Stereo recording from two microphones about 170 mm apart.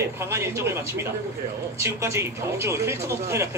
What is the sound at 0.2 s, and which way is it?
A man's voice, 15° right (ahead or behind).